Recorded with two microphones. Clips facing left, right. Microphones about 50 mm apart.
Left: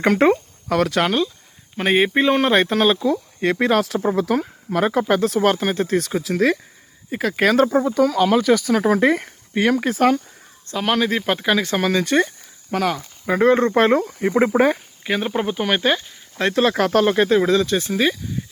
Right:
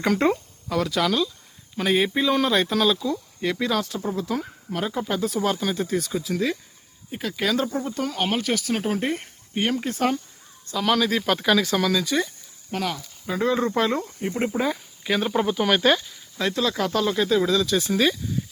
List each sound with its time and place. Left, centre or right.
0.2 s speech: left
1.0 s speech: left
3.1 s speech: left
5.6 s speech: left
10.7 s speech: left
11.6 s speech: left
12.0 s speech: left
12.7 s speech: left
15.0 s speech: centre
16.4 s speech: left
17.9 s speech: left